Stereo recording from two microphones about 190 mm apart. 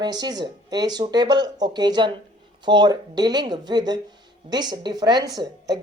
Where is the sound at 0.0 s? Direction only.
20° right (ahead or behind).